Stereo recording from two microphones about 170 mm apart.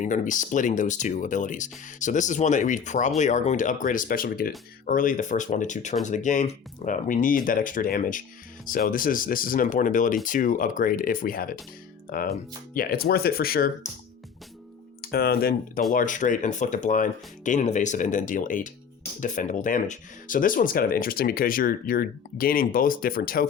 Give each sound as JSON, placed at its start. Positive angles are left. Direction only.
{"t": 0.0, "sound": "speech", "side_deg": 45}
{"t": 15.0, "sound": "speech", "side_deg": 65}
{"t": 15.9, "sound": "speech", "side_deg": 50}